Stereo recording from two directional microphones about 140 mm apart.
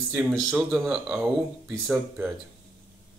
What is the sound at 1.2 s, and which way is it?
Speech, 15° right (ahead or behind).